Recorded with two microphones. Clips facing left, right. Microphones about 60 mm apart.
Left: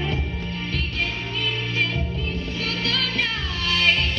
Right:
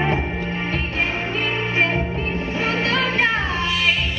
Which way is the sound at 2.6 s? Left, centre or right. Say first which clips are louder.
Right 6 dB; right.